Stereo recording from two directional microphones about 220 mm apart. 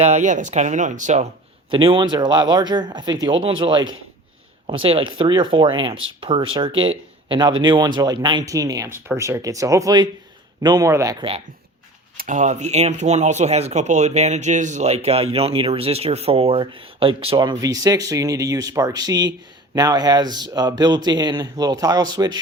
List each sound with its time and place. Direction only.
0.0 s a man's voice: 30° right (ahead or behind)
12.1 s speech: 35° right (ahead or behind); by 22.4 s 20° right (ahead or behind)